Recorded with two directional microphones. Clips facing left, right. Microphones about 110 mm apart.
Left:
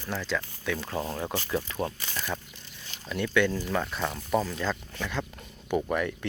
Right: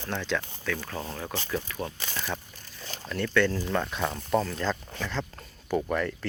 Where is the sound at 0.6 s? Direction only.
20° left (ahead or behind).